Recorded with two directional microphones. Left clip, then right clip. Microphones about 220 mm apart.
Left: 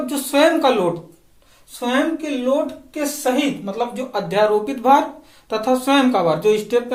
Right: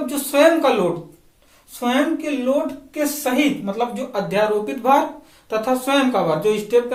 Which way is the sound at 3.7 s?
30° left (ahead or behind).